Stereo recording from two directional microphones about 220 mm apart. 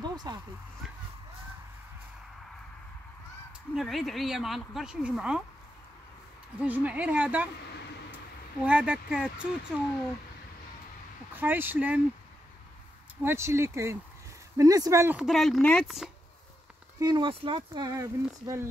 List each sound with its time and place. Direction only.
0.0 s a sound: 20° right (ahead or behind)
3.7 s speech: centre (ahead or behind)
6.6 s a woman's voice: 5° right (ahead or behind)
8.6 s speech: 5° right (ahead or behind)
11.3 s a woman's voice: 10° right (ahead or behind)
13.2 s a woman's voice: 10° right (ahead or behind)
17.0 s speech: 20° right (ahead or behind)